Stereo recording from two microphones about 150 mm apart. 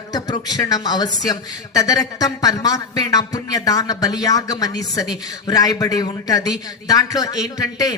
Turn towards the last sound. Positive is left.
turn(degrees=25)  # may be behind; listen again after turning